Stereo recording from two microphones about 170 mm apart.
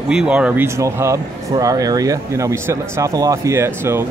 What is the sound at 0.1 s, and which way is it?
Speech, 5° right (ahead or behind).